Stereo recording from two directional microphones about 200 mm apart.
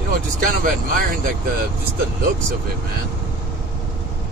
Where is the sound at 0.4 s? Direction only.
45° right (ahead or behind).